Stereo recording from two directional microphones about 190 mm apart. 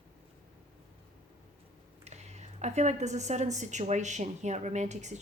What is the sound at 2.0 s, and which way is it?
A woman's voice, 35° right (ahead or behind).